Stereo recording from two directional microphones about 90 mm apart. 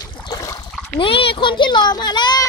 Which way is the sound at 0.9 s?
85° left.